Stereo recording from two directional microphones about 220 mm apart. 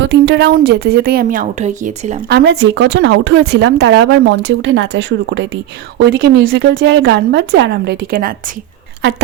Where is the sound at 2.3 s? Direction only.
50° right (ahead or behind).